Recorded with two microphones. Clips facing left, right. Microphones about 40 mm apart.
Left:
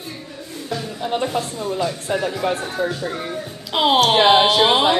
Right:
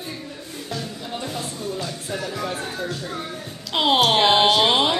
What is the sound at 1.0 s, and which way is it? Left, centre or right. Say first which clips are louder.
Speech: left 8 dB; left.